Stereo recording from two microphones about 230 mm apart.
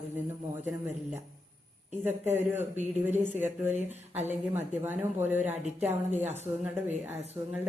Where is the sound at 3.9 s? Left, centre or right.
Right.